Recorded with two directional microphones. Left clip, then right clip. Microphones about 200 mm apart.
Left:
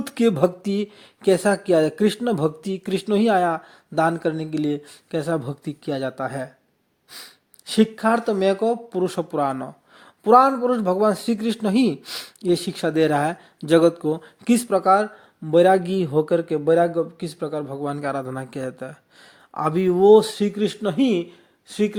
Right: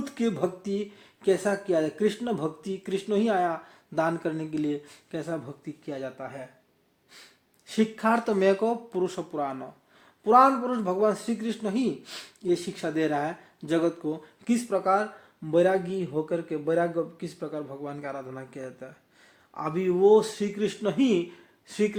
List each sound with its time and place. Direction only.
0.0 s speech: 35° left (ahead or behind)
7.1 s speech: 40° left (ahead or behind)
7.9 s speech: 15° left (ahead or behind)